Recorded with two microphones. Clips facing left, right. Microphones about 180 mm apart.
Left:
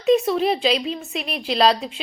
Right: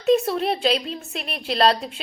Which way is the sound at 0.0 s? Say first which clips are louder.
Left 2 dB; centre (ahead or behind).